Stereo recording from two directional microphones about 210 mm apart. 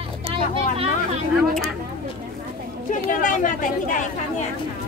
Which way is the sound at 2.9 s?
35° left (ahead or behind).